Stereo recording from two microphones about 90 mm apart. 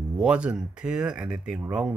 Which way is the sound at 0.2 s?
10° right (ahead or behind).